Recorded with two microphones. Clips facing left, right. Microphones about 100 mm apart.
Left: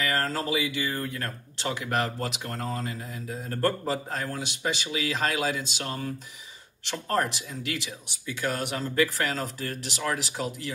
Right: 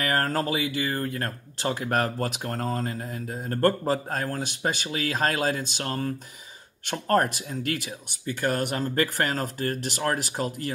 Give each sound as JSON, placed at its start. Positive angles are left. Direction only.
{"t": 0.0, "sound": "speech", "side_deg": -50}